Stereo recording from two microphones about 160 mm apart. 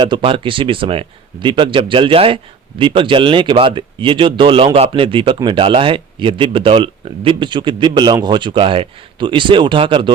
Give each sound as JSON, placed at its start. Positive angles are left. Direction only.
{"t": 0.0, "sound": "speech", "side_deg": -30}